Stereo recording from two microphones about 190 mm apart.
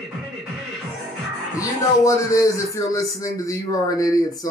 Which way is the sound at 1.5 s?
15° left (ahead or behind).